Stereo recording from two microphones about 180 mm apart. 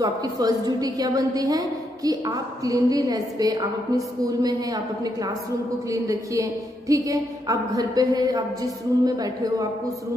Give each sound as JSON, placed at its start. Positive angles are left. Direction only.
{"t": 0.0, "sound": "a woman's voice", "side_deg": -20}